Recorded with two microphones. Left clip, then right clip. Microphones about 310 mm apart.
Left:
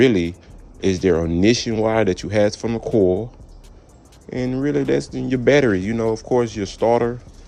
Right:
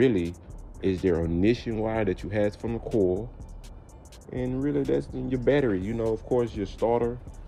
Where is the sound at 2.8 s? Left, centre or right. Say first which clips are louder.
Left 8 dB; left.